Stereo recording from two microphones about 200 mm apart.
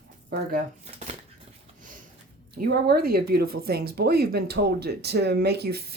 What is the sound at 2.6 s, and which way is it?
Speech, 50° right (ahead or behind).